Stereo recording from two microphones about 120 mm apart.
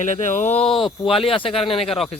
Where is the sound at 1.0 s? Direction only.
50° left (ahead or behind).